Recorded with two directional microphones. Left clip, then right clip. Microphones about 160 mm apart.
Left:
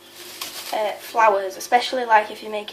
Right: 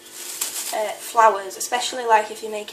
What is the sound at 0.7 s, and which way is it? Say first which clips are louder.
A woman's voice: right 1 dB; 20° left (ahead or behind).